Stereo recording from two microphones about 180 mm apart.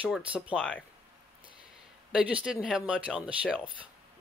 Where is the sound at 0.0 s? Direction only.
5° right (ahead or behind).